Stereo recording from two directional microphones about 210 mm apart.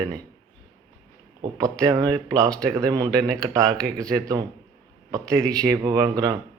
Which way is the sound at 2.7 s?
15° right (ahead or behind).